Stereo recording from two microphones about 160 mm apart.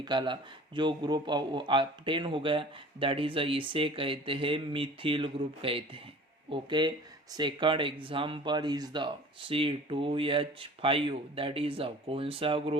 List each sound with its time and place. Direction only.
0.0 s speech: 30° right (ahead or behind)